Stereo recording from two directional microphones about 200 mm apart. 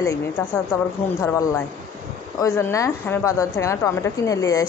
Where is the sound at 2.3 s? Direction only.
15° left (ahead or behind).